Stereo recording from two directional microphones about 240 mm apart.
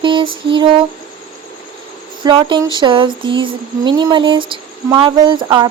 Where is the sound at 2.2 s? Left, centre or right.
Centre.